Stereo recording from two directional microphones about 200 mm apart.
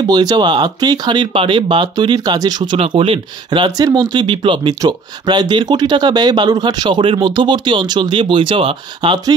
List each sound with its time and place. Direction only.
0.1 s speech: 20° right (ahead or behind)